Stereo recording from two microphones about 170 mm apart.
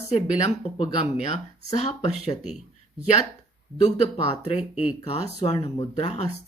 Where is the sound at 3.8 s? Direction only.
35° left (ahead or behind).